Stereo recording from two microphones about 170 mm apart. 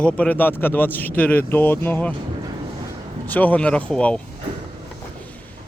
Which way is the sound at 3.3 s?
10° left (ahead or behind).